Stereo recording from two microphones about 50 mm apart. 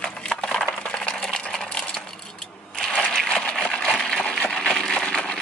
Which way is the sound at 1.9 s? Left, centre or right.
Centre.